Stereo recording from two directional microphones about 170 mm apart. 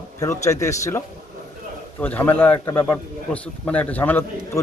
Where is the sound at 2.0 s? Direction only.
10° left (ahead or behind).